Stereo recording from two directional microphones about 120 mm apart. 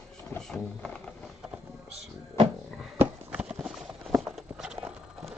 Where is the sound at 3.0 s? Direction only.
10° right (ahead or behind).